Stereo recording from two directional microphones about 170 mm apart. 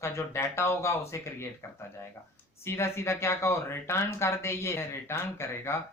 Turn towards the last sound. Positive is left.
turn(degrees=15)  # may be behind; listen again after turning